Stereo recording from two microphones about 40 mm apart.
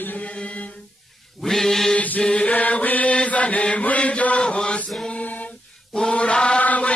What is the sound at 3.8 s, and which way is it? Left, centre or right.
Chant, left.